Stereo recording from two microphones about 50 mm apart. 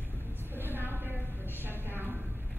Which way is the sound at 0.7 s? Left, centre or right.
Right.